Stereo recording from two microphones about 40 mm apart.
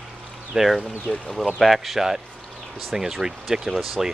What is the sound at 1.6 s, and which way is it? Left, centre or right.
Speech, centre.